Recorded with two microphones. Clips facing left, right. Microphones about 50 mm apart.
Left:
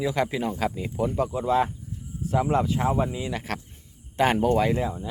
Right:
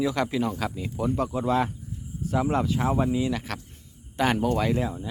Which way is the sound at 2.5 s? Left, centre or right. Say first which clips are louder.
Left 2 dB; left.